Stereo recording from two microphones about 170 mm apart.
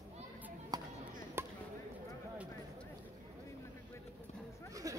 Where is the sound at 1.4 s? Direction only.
15° right (ahead or behind).